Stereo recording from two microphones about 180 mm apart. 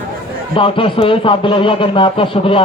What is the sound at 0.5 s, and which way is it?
Speech, 30° left (ahead or behind).